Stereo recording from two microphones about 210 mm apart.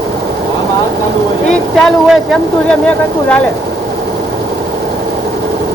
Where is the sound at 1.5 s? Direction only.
5° left (ahead or behind).